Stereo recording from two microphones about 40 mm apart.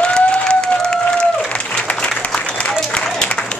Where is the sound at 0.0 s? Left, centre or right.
Left.